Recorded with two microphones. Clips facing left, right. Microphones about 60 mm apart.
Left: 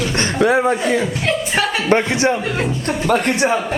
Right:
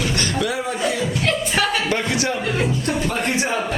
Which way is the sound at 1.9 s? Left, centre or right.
Left.